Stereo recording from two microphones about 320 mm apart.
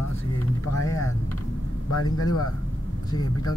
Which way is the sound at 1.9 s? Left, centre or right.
Left.